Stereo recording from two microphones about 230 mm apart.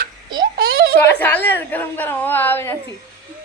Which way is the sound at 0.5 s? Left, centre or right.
Right.